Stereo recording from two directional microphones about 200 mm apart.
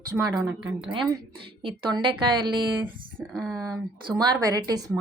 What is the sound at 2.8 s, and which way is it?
Speech, 10° right (ahead or behind).